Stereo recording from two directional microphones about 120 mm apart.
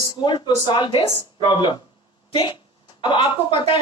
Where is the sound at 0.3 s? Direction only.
40° left (ahead or behind).